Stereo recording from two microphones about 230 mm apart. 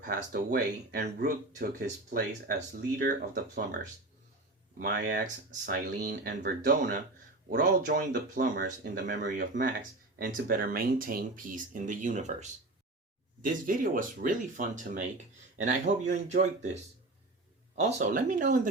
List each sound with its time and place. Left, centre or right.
0.0 s speech: right
4.8 s speech: right